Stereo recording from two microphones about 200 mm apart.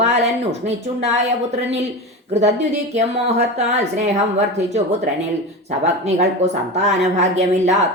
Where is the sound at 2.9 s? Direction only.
35° right (ahead or behind).